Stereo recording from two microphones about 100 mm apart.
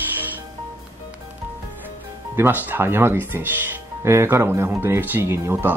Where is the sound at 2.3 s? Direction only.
20° right (ahead or behind).